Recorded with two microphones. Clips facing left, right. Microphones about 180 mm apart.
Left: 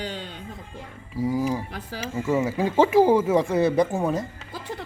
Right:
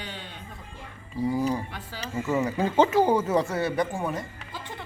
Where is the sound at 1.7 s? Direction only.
40° left (ahead or behind).